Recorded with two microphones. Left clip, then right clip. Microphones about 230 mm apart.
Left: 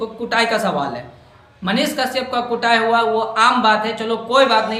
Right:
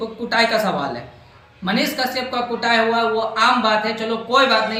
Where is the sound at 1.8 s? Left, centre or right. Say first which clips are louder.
Left 2 dB; centre.